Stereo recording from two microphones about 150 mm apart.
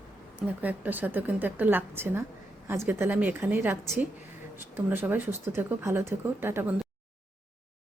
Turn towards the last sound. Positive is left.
turn(degrees=-15)  # may be behind; listen again after turning